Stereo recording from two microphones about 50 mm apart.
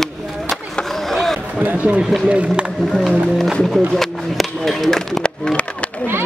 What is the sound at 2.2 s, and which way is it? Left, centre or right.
Speech, right.